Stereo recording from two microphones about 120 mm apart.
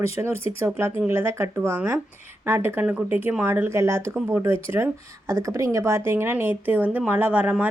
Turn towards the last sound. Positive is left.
turn(degrees=-15)  # may be behind; listen again after turning